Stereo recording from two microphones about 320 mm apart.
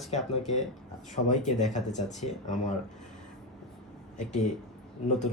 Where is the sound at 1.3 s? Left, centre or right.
Left.